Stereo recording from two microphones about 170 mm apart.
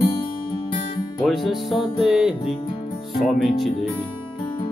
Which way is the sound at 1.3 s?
Centre (ahead or behind).